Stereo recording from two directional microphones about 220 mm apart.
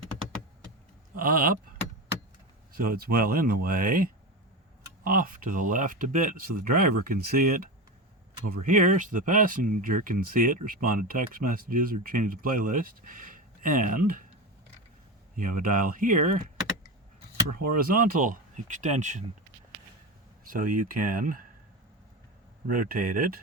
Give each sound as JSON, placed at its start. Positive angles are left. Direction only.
{"t": 1.1, "sound": "speech", "side_deg": -40}
{"t": 2.7, "sound": "speech", "side_deg": -40}
{"t": 15.4, "sound": "speech", "side_deg": -40}
{"t": 17.6, "sound": "speech", "side_deg": -40}
{"t": 20.4, "sound": "speech", "side_deg": -40}
{"t": 22.6, "sound": "speech", "side_deg": -40}